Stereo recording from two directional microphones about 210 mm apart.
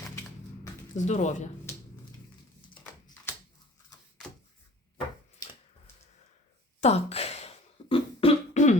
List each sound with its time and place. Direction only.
0.9 s speech: 35° left (ahead or behind)
6.8 s beatboxing: 30° left (ahead or behind)